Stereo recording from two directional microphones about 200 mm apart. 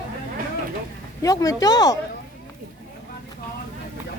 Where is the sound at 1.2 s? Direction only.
15° left (ahead or behind).